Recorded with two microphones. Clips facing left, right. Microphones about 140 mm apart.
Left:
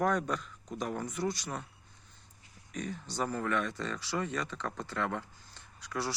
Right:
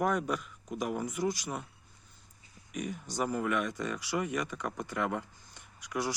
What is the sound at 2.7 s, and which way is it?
Speech, 15° right (ahead or behind).